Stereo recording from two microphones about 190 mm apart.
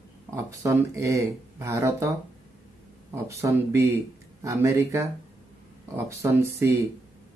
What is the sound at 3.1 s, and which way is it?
Speech, 15° right (ahead or behind).